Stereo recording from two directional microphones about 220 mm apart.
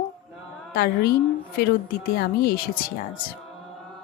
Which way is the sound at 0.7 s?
45° left (ahead or behind).